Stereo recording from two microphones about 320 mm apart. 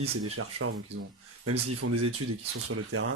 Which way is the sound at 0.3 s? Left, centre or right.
Right.